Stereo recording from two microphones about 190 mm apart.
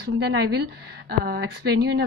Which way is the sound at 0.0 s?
60° right (ahead or behind).